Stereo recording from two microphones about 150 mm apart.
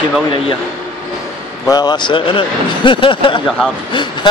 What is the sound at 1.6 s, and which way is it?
Speech, 25° left (ahead or behind).